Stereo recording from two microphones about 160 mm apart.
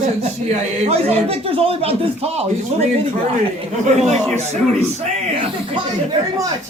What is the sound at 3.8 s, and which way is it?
Speech, 45° right (ahead or behind).